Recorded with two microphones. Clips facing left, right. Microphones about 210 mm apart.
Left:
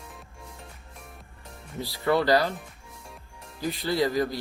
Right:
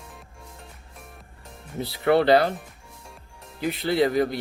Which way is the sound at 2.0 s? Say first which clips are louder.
Right 4 dB; 65° right (ahead or behind).